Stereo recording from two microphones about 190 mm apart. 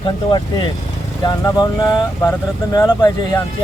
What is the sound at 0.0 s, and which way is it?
Speech, 20° left (ahead or behind).